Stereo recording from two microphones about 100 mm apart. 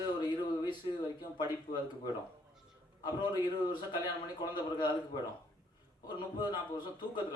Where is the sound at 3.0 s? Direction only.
50° left (ahead or behind).